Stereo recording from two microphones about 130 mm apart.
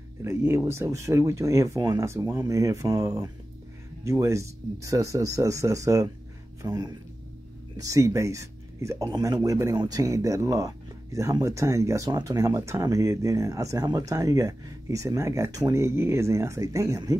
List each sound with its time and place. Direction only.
0.2 s speech: 20° right (ahead or behind)